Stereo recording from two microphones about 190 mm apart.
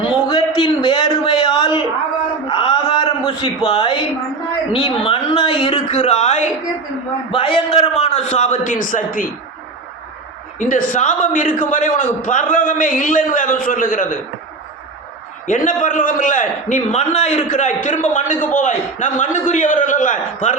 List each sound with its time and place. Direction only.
0.3 s a sound: 25° left (ahead or behind)
4.7 s a man's voice: 30° left (ahead or behind); by 9.2 s 45° left (ahead or behind)
10.6 s a man's voice: 45° left (ahead or behind)
15.4 s a man's voice: 45° left (ahead or behind)